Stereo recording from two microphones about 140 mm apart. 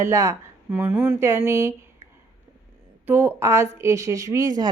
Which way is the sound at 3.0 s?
15° right (ahead or behind).